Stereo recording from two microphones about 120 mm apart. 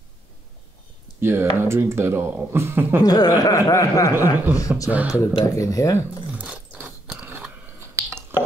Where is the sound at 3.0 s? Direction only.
35° left (ahead or behind).